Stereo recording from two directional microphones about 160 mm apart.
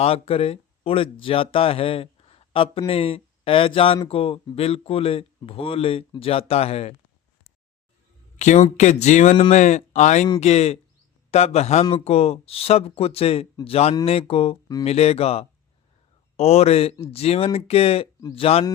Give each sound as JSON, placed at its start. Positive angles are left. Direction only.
{"t": 0.0, "sound": "speech", "side_deg": 40}
{"t": 8.4, "sound": "speech", "side_deg": 50}